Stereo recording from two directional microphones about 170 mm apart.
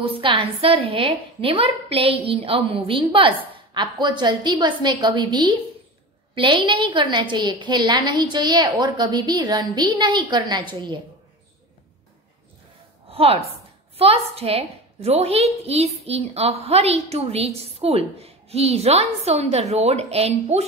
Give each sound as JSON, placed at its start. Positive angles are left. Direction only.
{"t": 0.0, "sound": "a woman's voice", "side_deg": -30}
{"t": 13.1, "sound": "a woman's voice", "side_deg": -35}